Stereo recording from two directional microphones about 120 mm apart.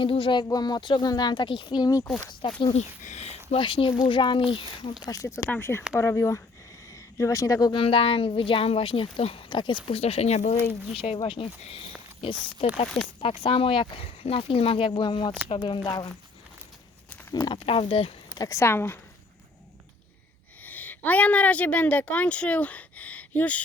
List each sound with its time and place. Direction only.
0.0 s speech: 45° left (ahead or behind)
0.4 s speech: 35° left (ahead or behind)
2.7 s speech: 80° left
3.6 s speech: 45° left (ahead or behind)
5.0 s a woman's voice: 25° left (ahead or behind)
7.7 s speech: 50° left (ahead or behind)
9.8 s speech: 55° left (ahead or behind); by 16.0 s 40° left (ahead or behind)
17.4 s speech: 45° left (ahead or behind)
18.3 s a woman's voice: 30° left (ahead or behind)
20.7 s speech: 15° left (ahead or behind)